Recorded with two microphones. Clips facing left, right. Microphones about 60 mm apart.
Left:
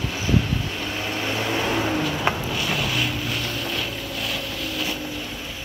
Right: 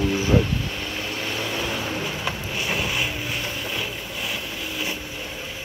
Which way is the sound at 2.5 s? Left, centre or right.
Right.